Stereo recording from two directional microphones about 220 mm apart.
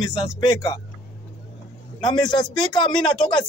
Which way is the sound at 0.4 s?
20° left (ahead or behind).